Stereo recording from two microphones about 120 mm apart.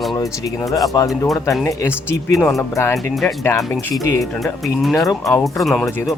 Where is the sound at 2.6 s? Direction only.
25° left (ahead or behind).